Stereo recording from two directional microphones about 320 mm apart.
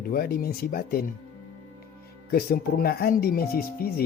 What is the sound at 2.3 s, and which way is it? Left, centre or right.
Speech, left.